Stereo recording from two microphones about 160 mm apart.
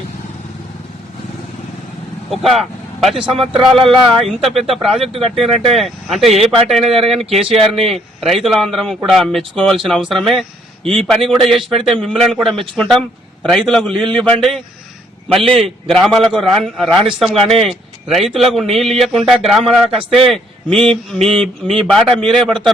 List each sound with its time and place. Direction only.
2.3 s a man's voice: centre (ahead or behind)
7.4 s speech: 35° right (ahead or behind)
7.9 s a man's voice: centre (ahead or behind)